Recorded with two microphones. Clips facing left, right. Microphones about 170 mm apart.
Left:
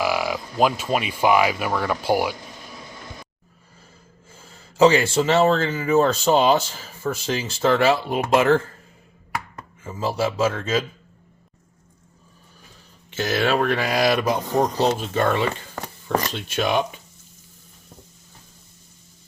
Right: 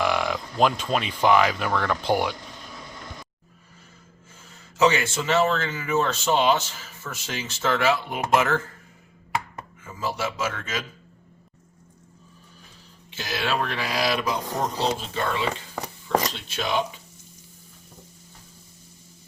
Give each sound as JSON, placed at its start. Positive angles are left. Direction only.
{"t": 0.0, "sound": "speech", "side_deg": 5}
{"t": 4.4, "sound": "speech", "side_deg": 35}
{"t": 9.8, "sound": "speech", "side_deg": 30}
{"t": 13.1, "sound": "speech", "side_deg": 55}